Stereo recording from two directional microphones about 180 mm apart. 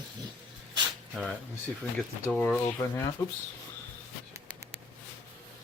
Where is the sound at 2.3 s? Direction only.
10° left (ahead or behind).